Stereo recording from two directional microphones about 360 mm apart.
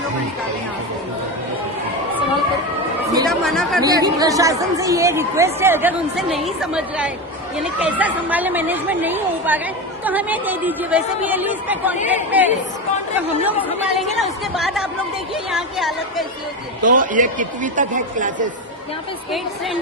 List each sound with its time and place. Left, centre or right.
3.2 s speech: centre
3.8 s speech: centre
16.8 s speech: right